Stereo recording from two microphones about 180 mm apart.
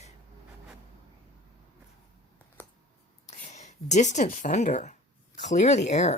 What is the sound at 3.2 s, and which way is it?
Speech, 40° left (ahead or behind).